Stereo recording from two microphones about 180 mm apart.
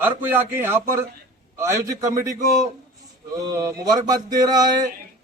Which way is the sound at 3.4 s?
20° right (ahead or behind).